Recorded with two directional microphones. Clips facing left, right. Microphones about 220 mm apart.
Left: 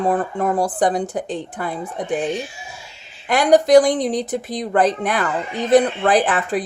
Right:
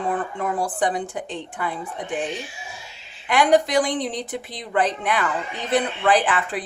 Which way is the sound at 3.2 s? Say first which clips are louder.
Left 4 dB; 40° left (ahead or behind).